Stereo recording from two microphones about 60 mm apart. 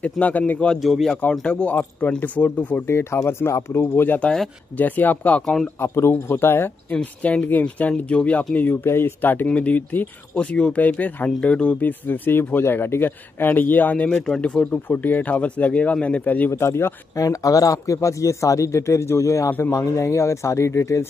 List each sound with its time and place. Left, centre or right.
0.0 s speech: left
0.7 s speech: centre
1.3 s a man's voice: centre
2.9 s speech: left
5.8 s speech: left
6.9 s speech: left
8.8 s speech: left
9.5 s speech: left
16.4 s speech: left
17.2 s speech: left